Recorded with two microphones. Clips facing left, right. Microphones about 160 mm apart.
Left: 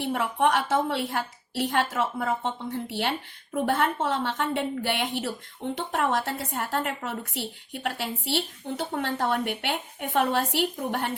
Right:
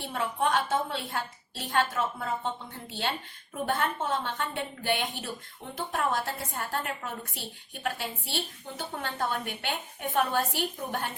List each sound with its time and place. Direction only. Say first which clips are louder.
0.0 s a woman's voice: left 5 dB; 75° left (ahead or behind)